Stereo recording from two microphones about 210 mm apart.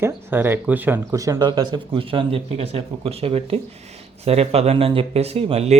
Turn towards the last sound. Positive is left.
turn(degrees=-30)  # may be behind; listen again after turning